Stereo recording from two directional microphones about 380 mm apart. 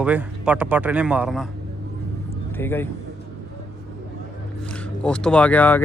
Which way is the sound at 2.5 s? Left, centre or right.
Centre.